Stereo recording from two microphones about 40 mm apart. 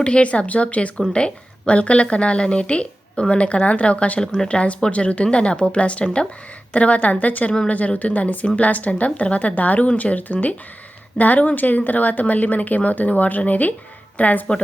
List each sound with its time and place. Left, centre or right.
0.0 s a woman's voice: left
4.2 s a woman's voice: centre; by 14.4 s left